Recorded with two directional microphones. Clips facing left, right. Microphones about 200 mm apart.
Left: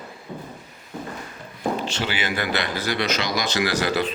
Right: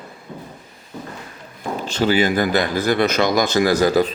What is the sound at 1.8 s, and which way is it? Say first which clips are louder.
A man's voice: right 9 dB; 45° right (ahead or behind).